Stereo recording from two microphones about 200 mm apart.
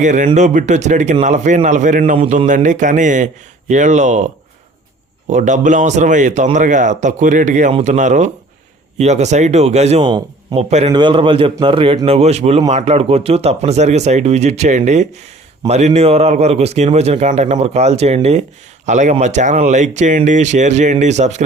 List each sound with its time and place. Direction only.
0.0 s speech: 40° right (ahead or behind)
2.1 s speech: 30° right (ahead or behind)
5.3 s speech: 40° right (ahead or behind)